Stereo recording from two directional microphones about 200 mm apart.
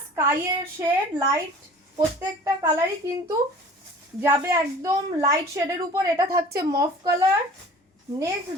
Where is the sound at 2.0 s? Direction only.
15° right (ahead or behind).